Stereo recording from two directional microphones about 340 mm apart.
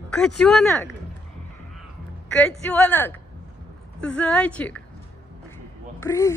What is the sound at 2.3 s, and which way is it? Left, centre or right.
A woman's voice, centre.